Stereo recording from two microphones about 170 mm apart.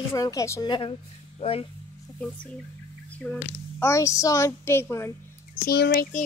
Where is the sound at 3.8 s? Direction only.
20° left (ahead or behind).